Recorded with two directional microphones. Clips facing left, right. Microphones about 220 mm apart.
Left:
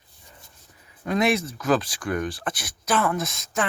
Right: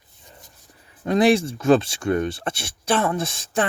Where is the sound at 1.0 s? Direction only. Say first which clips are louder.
Right 5 dB; 30° right (ahead or behind).